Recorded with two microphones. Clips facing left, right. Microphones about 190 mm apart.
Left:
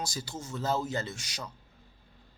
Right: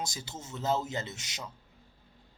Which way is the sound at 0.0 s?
20° right (ahead or behind).